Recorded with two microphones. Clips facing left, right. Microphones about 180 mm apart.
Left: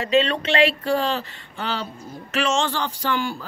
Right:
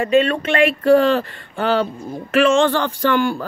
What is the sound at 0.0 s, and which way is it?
Speech, 50° right (ahead or behind).